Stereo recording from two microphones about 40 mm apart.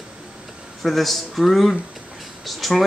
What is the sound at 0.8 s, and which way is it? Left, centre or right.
Speech, centre.